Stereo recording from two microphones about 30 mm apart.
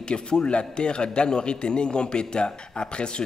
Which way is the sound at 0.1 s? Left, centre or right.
Left.